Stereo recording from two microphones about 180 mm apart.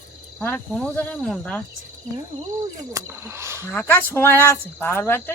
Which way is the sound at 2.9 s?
15° right (ahead or behind).